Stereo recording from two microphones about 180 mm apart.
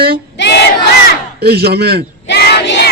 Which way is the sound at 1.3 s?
60° right (ahead or behind).